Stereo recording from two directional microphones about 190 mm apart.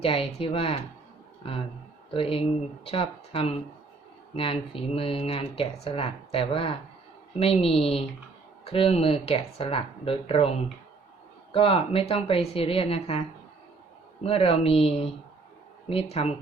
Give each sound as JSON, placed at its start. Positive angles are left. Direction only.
{"t": 0.0, "sound": "speech", "side_deg": 30}
{"t": 14.3, "sound": "speech", "side_deg": 30}